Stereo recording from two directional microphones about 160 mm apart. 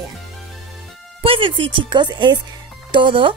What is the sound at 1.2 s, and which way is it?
Speech, 35° right (ahead or behind).